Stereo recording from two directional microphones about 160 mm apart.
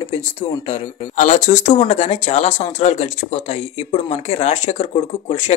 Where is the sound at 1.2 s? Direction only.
50° left (ahead or behind).